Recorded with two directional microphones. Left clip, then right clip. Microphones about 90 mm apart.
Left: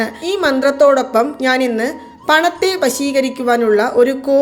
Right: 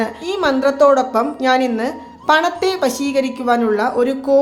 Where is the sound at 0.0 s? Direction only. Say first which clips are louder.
Left 2 dB; 30° left (ahead or behind).